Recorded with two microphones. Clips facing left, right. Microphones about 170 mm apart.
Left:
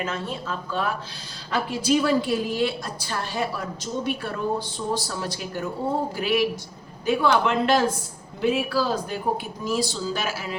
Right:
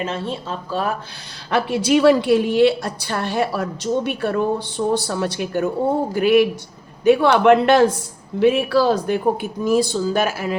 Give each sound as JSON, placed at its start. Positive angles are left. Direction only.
{"t": 0.0, "sound": "speech", "side_deg": -30}
{"t": 1.5, "sound": "a woman's voice", "side_deg": -70}
{"t": 9.6, "sound": "speech", "side_deg": -55}